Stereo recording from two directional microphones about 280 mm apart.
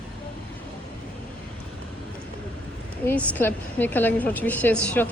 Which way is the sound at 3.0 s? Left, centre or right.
Centre.